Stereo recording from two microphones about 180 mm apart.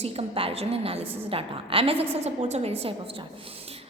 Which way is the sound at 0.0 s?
35° right (ahead or behind).